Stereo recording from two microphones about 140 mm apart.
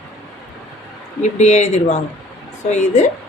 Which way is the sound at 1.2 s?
55° left (ahead or behind).